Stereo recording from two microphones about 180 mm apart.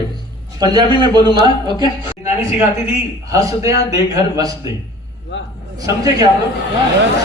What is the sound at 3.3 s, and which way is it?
A man's voice, 20° right (ahead or behind).